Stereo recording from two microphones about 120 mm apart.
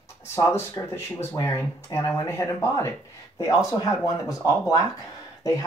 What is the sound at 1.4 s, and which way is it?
Speech, 25° left (ahead or behind).